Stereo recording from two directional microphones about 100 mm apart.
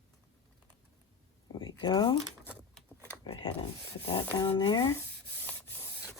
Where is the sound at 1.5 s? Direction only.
50° left (ahead or behind).